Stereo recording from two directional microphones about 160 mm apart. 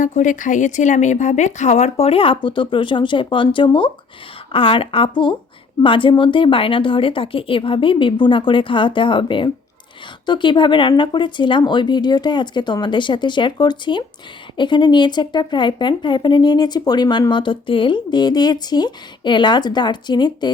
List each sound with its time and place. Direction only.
0.0 s a woman's voice: 50° left (ahead or behind); by 20.5 s 25° left (ahead or behind)